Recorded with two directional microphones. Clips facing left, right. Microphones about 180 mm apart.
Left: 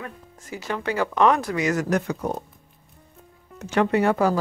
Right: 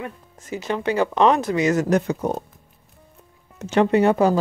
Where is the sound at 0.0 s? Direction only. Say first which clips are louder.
Right 4 dB; 20° right (ahead or behind).